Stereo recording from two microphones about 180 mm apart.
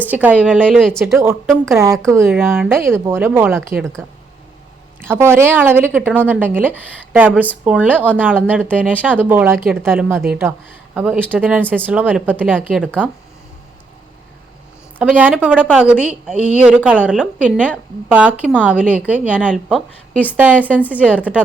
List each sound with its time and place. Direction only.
0.1 s speech: 10° right (ahead or behind)
4.9 s speech: 15° right (ahead or behind)
14.9 s a woman's voice: 10° right (ahead or behind)
19.7 s a woman's voice: 10° left (ahead or behind)
20.3 s speech: 10° right (ahead or behind)